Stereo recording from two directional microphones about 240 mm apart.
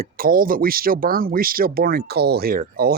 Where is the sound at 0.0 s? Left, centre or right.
Right.